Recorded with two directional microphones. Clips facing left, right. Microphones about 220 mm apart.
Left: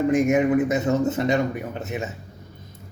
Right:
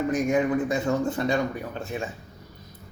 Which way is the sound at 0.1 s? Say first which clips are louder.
Left 4 dB; 25° left (ahead or behind).